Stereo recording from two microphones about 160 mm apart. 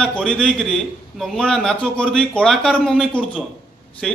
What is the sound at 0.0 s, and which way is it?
A man's voice, 5° left (ahead or behind).